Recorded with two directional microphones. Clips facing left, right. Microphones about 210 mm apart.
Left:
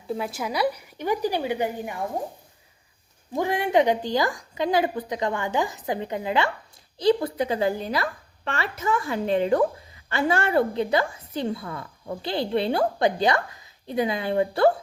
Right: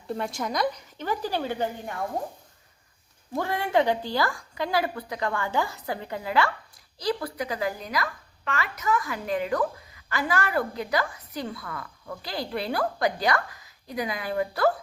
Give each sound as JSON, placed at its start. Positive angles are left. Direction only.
{"t": 0.1, "sound": "speech", "side_deg": 5}
{"t": 3.3, "sound": "a woman's voice", "side_deg": 15}